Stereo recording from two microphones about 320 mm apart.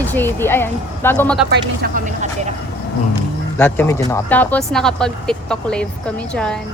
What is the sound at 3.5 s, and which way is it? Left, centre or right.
Speech, centre.